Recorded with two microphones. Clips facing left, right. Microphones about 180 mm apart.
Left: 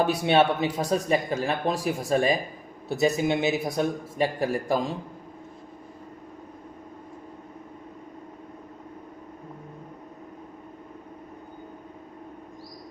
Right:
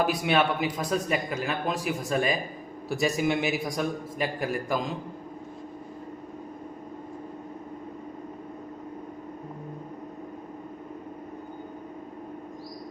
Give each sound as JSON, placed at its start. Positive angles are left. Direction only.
{"t": 0.0, "sound": "speech", "side_deg": 30}